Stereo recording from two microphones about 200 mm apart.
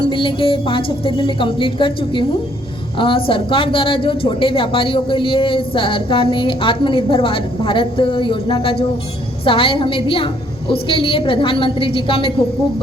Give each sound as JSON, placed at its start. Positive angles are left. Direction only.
{"t": 0.1, "sound": "a woman's voice", "side_deg": 25}